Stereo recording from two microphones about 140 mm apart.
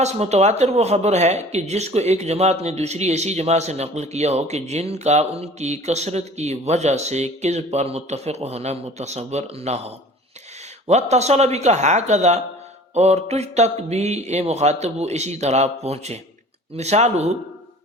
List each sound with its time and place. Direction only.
0.0 s speech: 50° right (ahead or behind)